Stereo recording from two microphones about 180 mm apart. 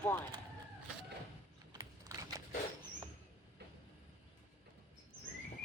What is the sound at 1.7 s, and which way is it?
Typing, 20° right (ahead or behind).